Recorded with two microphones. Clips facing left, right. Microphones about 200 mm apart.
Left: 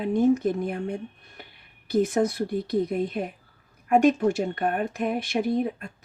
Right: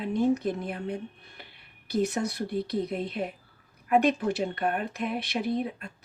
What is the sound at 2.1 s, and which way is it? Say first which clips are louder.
Speech: left 6 dB; 50° left (ahead or behind).